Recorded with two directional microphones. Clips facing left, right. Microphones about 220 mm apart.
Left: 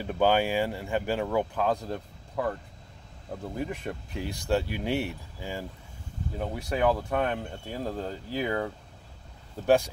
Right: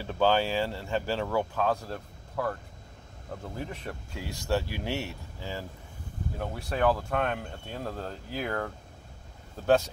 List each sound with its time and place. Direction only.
0.0 s speech: 15° left (ahead or behind)
3.5 s speech: 15° left (ahead or behind)